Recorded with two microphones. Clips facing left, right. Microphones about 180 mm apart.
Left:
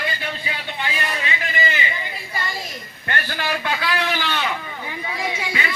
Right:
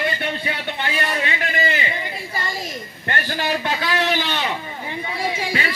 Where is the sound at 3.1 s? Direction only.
30° right (ahead or behind).